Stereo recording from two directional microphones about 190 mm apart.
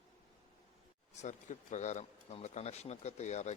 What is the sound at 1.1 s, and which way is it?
Speech, 40° left (ahead or behind).